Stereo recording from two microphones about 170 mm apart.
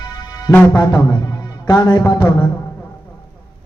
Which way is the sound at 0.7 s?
25° left (ahead or behind).